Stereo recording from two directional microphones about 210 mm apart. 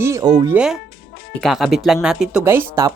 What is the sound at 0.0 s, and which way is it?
Speech, 15° right (ahead or behind).